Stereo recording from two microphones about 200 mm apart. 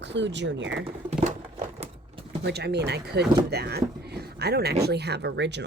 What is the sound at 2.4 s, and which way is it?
Speech, 55° right (ahead or behind).